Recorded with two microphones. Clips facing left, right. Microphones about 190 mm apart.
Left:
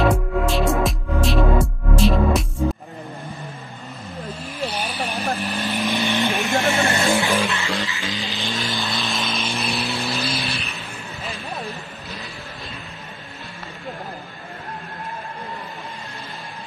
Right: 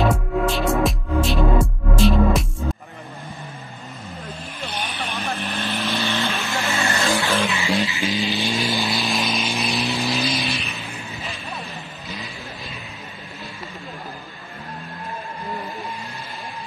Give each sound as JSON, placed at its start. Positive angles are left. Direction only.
{"t": 0.0, "sound": "music", "side_deg": 0}
{"t": 4.6, "sound": "vehicle", "side_deg": 35}
{"t": 5.4, "sound": "vehicle", "side_deg": 5}
{"t": 7.6, "sound": "music", "side_deg": -20}
{"t": 8.8, "sound": "vehicle", "side_deg": 0}